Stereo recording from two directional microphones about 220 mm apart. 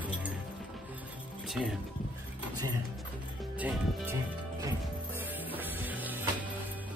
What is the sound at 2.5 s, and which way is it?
Music, 85° right.